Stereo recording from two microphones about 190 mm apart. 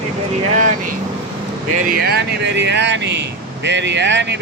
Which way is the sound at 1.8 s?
50° right (ahead or behind).